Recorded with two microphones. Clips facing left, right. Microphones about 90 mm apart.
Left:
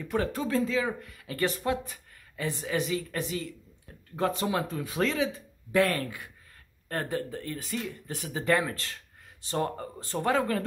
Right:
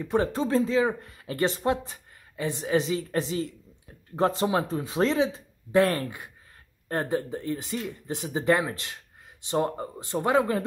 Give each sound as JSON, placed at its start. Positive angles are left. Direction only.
{"t": 0.0, "sound": "speech", "side_deg": -25}